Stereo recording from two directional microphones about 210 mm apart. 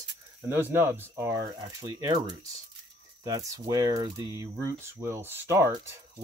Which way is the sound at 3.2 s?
15° right (ahead or behind).